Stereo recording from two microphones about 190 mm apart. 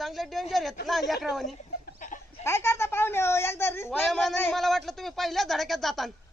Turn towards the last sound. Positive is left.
turn(degrees=0)  # may be behind; listen again after turning